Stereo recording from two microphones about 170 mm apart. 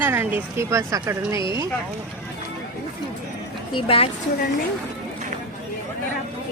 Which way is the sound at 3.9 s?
35° left (ahead or behind).